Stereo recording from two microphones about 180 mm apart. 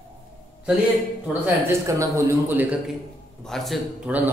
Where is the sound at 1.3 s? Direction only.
10° right (ahead or behind).